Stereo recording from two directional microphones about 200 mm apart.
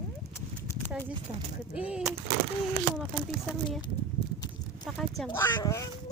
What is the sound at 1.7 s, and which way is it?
Speech, 5° right (ahead or behind).